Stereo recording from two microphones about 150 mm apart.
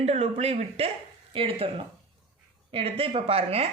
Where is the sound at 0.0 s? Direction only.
45° right (ahead or behind).